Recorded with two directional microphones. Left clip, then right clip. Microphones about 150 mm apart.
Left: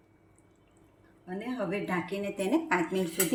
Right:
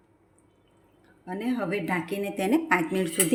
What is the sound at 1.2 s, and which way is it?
A woman's voice, 65° right (ahead or behind).